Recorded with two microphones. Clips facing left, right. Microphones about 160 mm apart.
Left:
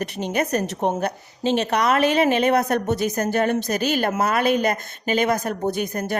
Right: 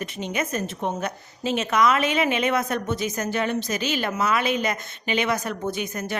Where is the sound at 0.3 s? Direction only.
40° left (ahead or behind).